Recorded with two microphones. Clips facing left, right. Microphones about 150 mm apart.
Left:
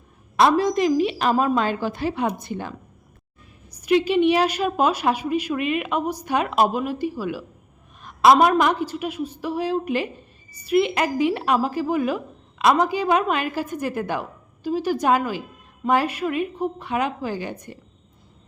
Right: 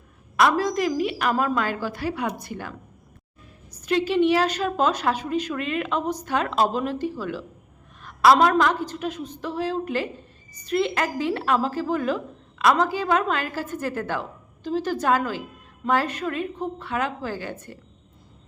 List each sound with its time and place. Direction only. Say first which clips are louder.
0.5 s a woman's voice: left 4 dB; 20° left (ahead or behind)
3.7 s a woman's voice: left 4 dB; 10° left (ahead or behind)